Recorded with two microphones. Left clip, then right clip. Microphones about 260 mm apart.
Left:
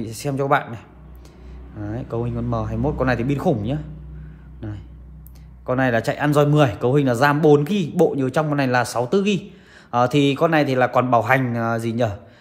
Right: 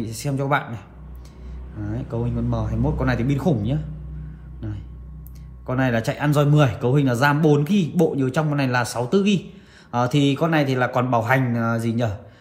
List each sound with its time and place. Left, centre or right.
0.0 s speech: left
5.7 s speech: left